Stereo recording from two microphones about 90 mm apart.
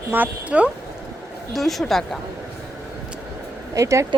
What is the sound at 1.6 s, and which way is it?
Speech, centre (ahead or behind).